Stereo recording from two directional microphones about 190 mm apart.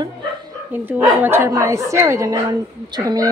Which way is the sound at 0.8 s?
10° right (ahead or behind).